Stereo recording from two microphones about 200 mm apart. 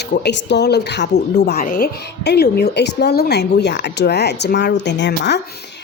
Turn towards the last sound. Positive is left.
turn(degrees=55)  # may be behind; listen again after turning